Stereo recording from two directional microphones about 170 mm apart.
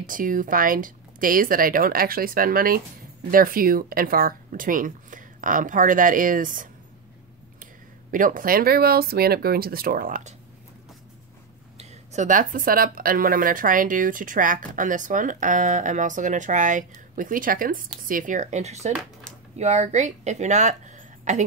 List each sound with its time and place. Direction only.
0.0 s speech: 55° right (ahead or behind)
8.1 s speech: 55° right (ahead or behind)
11.8 s a woman's voice: 45° right (ahead or behind)